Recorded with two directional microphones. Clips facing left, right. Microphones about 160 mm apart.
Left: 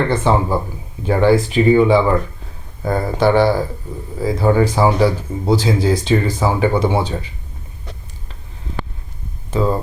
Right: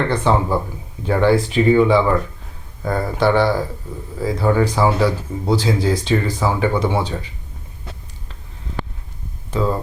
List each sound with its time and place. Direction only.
0.1 s speech: 10° left (ahead or behind)
2.8 s speech: 20° left (ahead or behind)
3.3 s speech: 10° left (ahead or behind)
4.2 s speech: 20° left (ahead or behind)
9.5 s speech: 15° left (ahead or behind)